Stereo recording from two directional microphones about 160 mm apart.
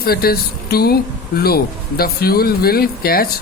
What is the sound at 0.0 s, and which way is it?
Speech, 70° left (ahead or behind).